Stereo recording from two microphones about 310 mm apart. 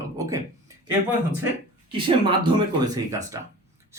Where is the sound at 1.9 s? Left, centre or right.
Centre.